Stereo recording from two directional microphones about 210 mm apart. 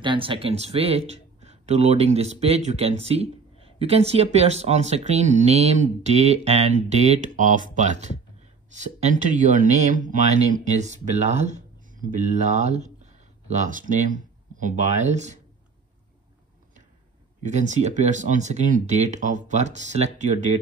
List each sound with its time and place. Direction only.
0.0 s speech: 25° right (ahead or behind)
17.4 s speech: 35° right (ahead or behind)